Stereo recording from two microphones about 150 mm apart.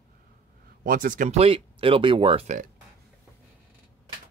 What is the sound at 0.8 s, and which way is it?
Speech, 65° right (ahead or behind).